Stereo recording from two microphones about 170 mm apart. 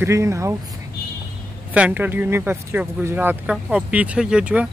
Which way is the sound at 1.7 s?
10° right (ahead or behind).